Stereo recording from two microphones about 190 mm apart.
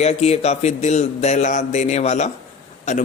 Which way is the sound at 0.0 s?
35° left (ahead or behind).